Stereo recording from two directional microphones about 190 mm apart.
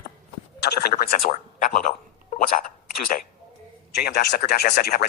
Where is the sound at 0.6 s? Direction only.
55° left (ahead or behind).